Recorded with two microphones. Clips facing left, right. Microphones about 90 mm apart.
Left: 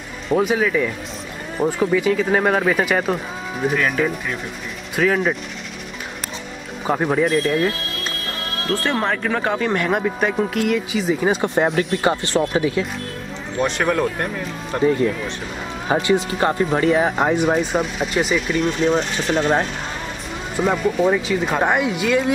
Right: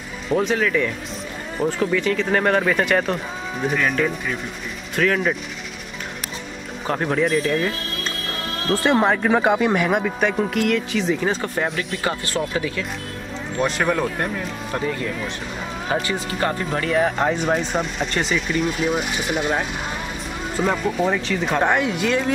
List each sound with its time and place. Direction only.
0.3 s speech: 5° left (ahead or behind)
6.9 s speech: 10° left (ahead or behind)
11.4 s speech: 20° left (ahead or behind)
13.6 s speech: centre (ahead or behind)
15.9 s speech: 20° left (ahead or behind); by 19.5 s 10° right (ahead or behind)
20.5 s speech: 5° left (ahead or behind)